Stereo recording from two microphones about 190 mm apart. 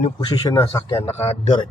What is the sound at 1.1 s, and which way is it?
Speech, 35° left (ahead or behind).